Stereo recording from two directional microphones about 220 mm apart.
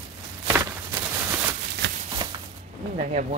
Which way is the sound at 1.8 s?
50° right (ahead or behind).